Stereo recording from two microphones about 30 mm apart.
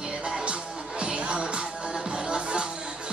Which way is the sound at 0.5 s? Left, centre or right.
Right.